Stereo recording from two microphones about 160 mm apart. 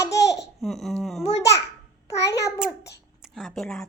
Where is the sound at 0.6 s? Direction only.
Centre (ahead or behind).